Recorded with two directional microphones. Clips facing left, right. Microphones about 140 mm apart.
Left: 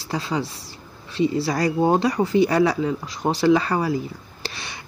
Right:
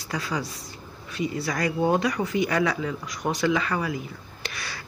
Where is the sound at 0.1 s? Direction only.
25° left (ahead or behind).